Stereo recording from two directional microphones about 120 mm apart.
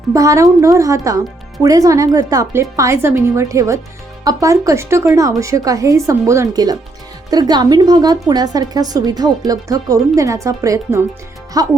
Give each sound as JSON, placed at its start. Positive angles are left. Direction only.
{"t": 0.1, "sound": "a woman's voice", "side_deg": -25}